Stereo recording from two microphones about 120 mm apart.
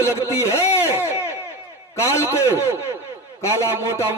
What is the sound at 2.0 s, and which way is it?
A man's voice, 25° left (ahead or behind).